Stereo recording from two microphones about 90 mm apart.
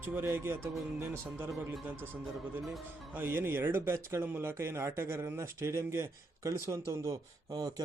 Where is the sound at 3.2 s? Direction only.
25° right (ahead or behind); by 7.7 s 40° right (ahead or behind).